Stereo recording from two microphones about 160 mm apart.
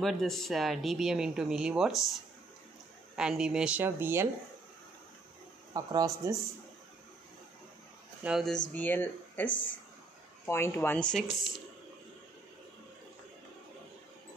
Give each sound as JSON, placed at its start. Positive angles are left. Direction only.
{"t": 0.0, "sound": "speech", "side_deg": 0}
{"t": 3.2, "sound": "speech", "side_deg": -5}
{"t": 5.7, "sound": "speech", "side_deg": -25}
{"t": 8.2, "sound": "speech", "side_deg": -5}
{"t": 8.7, "sound": "speech", "side_deg": 10}
{"t": 9.5, "sound": "speech", "side_deg": 55}
{"t": 10.4, "sound": "speech", "side_deg": 15}